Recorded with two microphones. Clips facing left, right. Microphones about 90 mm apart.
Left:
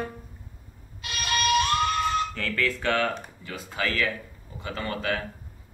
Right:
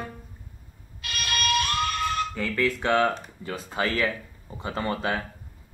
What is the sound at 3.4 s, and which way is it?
Speech, 30° right (ahead or behind).